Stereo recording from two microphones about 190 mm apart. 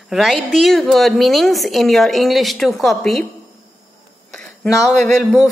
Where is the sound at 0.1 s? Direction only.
Centre (ahead or behind).